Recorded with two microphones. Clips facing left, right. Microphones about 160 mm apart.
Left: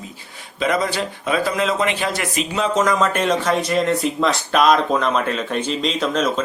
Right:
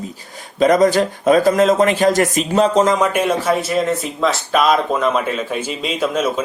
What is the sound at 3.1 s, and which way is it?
Speech, 10° right (ahead or behind).